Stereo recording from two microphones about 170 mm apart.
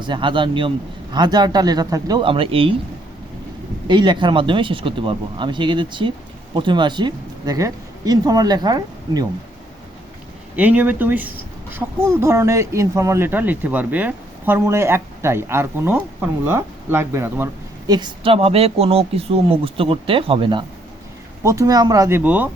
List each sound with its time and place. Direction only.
0.0 s speech: 30° right (ahead or behind)
3.8 s speech: 30° right (ahead or behind)
10.5 s speech: 10° right (ahead or behind)
17.8 s speech: 25° right (ahead or behind)
21.4 s speech: 20° right (ahead or behind)